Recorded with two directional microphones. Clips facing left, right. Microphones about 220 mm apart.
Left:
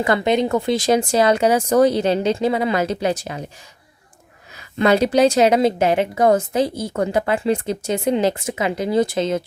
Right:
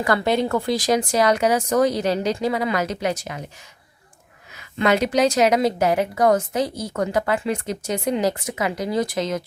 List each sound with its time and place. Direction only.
0.0 s a woman's voice: 20° left (ahead or behind)
4.5 s a woman's voice: 35° left (ahead or behind)